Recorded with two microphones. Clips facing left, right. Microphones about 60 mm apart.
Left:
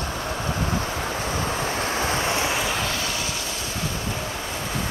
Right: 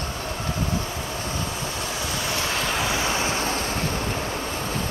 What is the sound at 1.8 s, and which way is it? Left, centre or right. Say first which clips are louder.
Vehicle: left 4 dB; left.